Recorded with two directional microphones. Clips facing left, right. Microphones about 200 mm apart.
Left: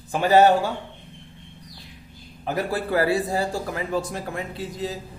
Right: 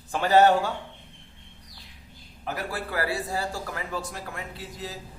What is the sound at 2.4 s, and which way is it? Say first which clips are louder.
A man's voice: left 7 dB; 25° left (ahead or behind).